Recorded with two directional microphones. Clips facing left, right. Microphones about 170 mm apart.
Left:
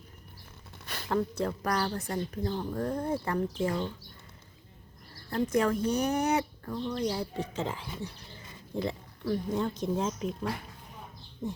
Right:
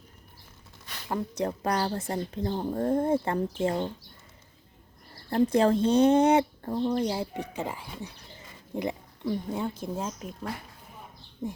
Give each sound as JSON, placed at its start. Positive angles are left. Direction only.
{"t": 1.1, "sound": "speech", "side_deg": -20}
{"t": 2.6, "sound": "speech", "side_deg": -40}
{"t": 2.8, "sound": "speech", "side_deg": -25}
{"t": 5.3, "sound": "speech", "side_deg": -30}
{"t": 6.7, "sound": "speech", "side_deg": -45}
{"t": 7.1, "sound": "speech", "side_deg": -20}